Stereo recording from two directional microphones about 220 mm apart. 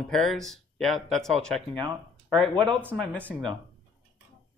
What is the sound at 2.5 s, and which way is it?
Speech, 20° right (ahead or behind).